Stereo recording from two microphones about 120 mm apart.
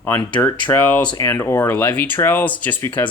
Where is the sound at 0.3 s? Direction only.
15° left (ahead or behind).